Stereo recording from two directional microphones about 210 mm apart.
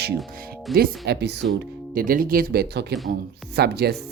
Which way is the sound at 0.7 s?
50° right (ahead or behind).